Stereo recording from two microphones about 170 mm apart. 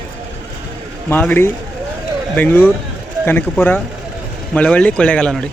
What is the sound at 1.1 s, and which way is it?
Speech, 10° left (ahead or behind).